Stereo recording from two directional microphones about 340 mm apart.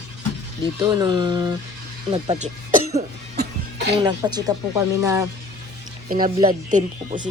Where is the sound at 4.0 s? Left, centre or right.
Centre.